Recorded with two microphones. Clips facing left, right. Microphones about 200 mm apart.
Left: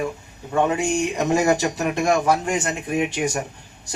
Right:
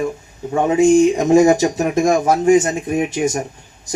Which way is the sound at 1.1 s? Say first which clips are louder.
Right 7 dB; 45° right (ahead or behind).